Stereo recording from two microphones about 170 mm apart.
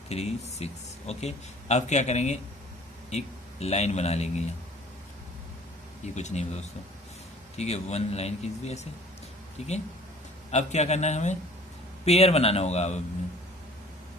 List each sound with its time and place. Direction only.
0.1 s speech: 40° left (ahead or behind)
6.1 s speech: 40° left (ahead or behind)